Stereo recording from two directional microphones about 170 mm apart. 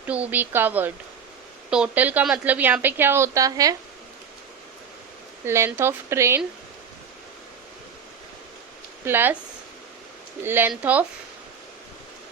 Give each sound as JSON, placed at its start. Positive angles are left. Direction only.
{"t": 0.0, "sound": "a woman's voice", "side_deg": -10}
{"t": 5.5, "sound": "a woman's voice", "side_deg": -15}
{"t": 9.0, "sound": "a woman's voice", "side_deg": -10}
{"t": 10.4, "sound": "a woman's voice", "side_deg": -10}